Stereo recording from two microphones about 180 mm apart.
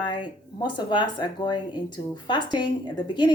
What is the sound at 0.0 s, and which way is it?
Speech, 25° left (ahead or behind).